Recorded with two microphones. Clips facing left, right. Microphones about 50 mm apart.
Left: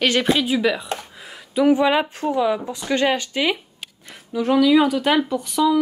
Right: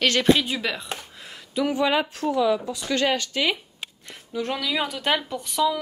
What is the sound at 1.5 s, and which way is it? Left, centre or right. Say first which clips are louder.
Speech: left 6 dB; centre.